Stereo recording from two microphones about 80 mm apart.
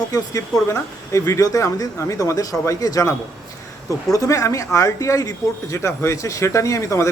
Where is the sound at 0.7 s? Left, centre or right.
Left.